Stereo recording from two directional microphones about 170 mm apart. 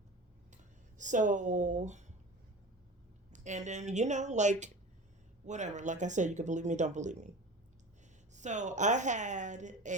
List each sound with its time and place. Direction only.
0.5 s a sound: 45° right (ahead or behind)
3.3 s speech: 45° right (ahead or behind)
8.3 s speech: 45° right (ahead or behind)